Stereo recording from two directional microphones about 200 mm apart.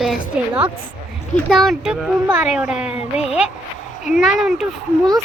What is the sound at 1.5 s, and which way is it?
Speech, centre (ahead or behind).